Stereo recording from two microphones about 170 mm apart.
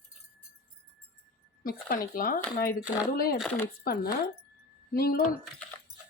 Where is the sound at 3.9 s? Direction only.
65° left (ahead or behind).